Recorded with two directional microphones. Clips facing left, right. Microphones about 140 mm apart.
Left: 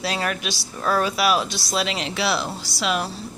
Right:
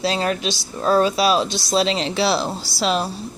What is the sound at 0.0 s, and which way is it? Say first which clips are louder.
Speech: right 5 dB; 25° right (ahead or behind).